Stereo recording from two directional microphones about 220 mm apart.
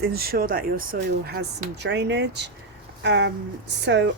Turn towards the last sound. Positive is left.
turn(degrees=-50)  # may be behind; listen again after turning